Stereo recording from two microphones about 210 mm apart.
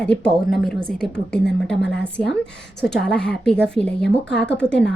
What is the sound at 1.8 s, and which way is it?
Speech, 55° left (ahead or behind).